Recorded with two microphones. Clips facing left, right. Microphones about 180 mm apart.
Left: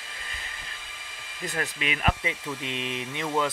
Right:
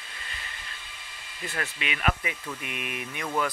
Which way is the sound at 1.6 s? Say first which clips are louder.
Left 2 dB; 35° left (ahead or behind).